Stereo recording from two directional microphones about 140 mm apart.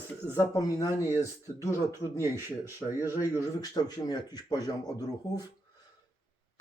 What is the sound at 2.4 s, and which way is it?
Speech, 15° right (ahead or behind).